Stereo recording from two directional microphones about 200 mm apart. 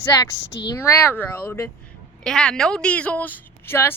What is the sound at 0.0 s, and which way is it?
A woman's voice, 15° left (ahead or behind).